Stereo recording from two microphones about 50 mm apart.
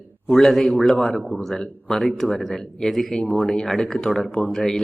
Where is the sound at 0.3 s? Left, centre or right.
Centre.